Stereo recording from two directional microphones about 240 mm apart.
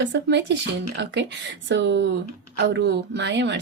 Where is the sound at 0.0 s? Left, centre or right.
Right.